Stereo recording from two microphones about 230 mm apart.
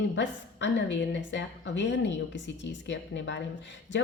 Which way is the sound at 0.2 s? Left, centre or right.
Left.